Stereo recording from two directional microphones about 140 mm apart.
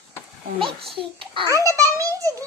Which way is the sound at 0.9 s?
40° right (ahead or behind).